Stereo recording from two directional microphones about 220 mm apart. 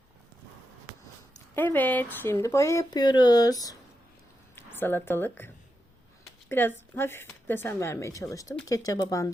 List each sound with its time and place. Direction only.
1.5 s speech: 10° left (ahead or behind)
6.5 s speech: 10° left (ahead or behind)